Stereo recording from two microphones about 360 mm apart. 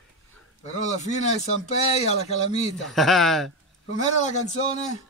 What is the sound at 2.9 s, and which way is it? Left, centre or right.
Speech, centre.